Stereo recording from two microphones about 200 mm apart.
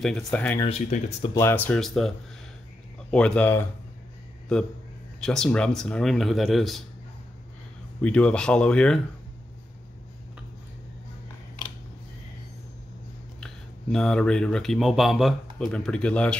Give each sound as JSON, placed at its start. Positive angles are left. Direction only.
{"t": 0.0, "sound": "speech", "side_deg": 5}
{"t": 0.6, "sound": "speech", "side_deg": 30}
{"t": 1.4, "sound": "speech", "side_deg": 10}
{"t": 8.0, "sound": "speech", "side_deg": 5}
{"t": 13.4, "sound": "speech", "side_deg": 5}